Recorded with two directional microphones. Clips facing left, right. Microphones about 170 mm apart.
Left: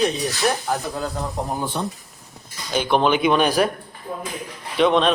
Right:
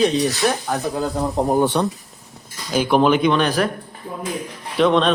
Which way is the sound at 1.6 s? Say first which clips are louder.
Right 7 dB; 75° right (ahead or behind).